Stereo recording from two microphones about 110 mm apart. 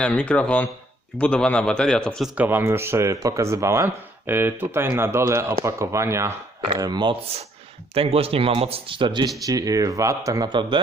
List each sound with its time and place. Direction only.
0.0 s a man's voice: 10° left (ahead or behind)
2.2 s speech: 15° right (ahead or behind)
6.7 s speech: 40° right (ahead or behind)
7.9 s speech: 60° right (ahead or behind); by 9.3 s 45° right (ahead or behind)
9.5 s speech: 35° right (ahead or behind)
10.5 s speech: 45° right (ahead or behind)